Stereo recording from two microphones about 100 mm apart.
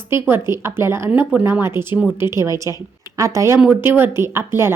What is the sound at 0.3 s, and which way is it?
A woman's voice, 25° right (ahead or behind).